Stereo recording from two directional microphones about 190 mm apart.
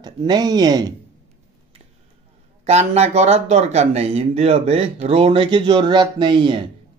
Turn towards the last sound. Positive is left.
turn(degrees=-25)  # may be behind; listen again after turning